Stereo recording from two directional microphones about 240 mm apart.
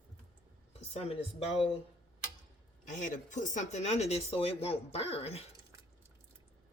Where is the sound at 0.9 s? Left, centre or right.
Left.